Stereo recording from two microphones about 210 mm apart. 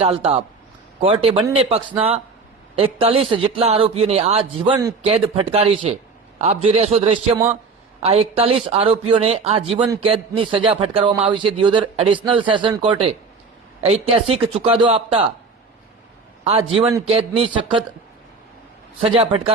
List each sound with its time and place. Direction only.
0.0 s speech: 30° right (ahead or behind)
16.4 s a man's voice: 25° right (ahead or behind)
19.0 s speech: 25° right (ahead or behind)